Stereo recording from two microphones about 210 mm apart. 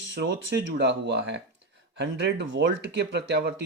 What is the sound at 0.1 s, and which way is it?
Speech, 55° right (ahead or behind).